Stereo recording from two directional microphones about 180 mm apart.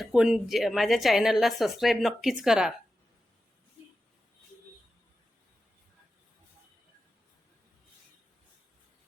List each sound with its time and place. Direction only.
0.0 s a woman's voice: 5° right (ahead or behind)